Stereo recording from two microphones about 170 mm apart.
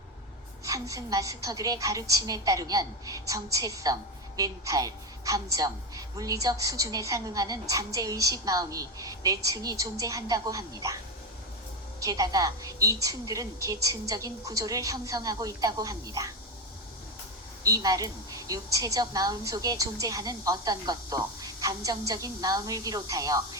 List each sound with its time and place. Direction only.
0.6 s a woman's voice: 20° right (ahead or behind)
17.6 s a woman's voice: 20° right (ahead or behind)